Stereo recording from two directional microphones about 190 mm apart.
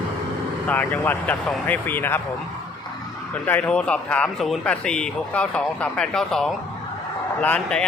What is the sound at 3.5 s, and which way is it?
A man's voice, 10° left (ahead or behind).